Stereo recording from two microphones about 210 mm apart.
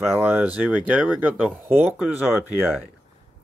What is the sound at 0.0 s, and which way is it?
Speech, centre (ahead or behind).